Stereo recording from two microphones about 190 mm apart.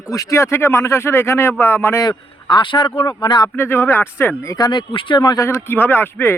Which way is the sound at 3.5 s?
10° left (ahead or behind).